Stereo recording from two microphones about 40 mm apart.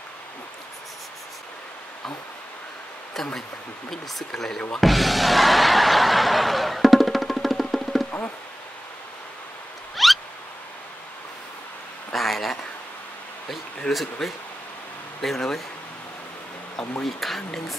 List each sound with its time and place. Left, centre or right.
4.3 s speech: centre
4.7 s music: centre
10.0 s a sound: centre
12.1 s a sound: centre
13.9 s speech: left
15.2 s speech: centre
17.0 s speech: centre